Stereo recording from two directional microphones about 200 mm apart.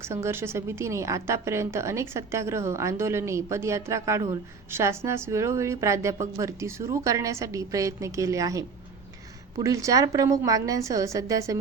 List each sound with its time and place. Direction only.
0.0 s a woman's voice: 15° right (ahead or behind)